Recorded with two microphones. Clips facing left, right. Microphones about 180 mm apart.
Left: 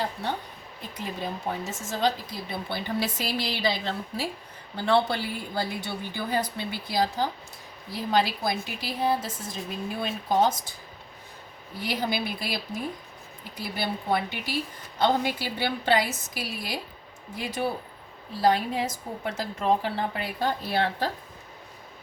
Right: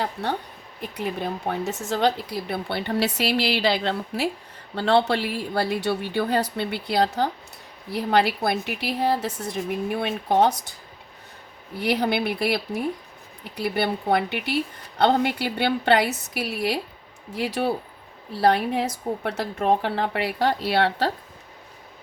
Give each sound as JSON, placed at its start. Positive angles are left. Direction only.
{"t": 0.8, "sound": "a woman's voice", "side_deg": -65}
{"t": 11.8, "sound": "a woman's voice", "side_deg": -65}